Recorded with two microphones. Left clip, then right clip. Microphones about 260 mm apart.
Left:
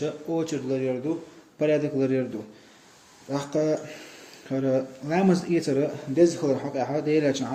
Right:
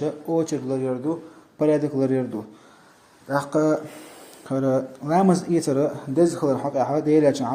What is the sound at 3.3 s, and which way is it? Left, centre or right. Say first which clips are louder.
Speech: right 4 dB; right.